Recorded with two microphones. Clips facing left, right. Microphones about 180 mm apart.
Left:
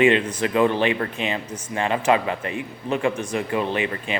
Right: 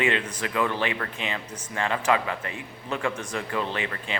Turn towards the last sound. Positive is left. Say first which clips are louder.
# left 6 dB
turn(degrees=15)  # may be behind; listen again after turning